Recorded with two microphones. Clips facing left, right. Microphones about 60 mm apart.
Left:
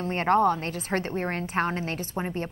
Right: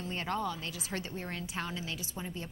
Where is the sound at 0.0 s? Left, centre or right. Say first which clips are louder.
Left 13 dB; left.